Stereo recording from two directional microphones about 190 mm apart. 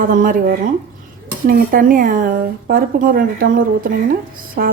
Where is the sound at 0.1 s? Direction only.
45° right (ahead or behind).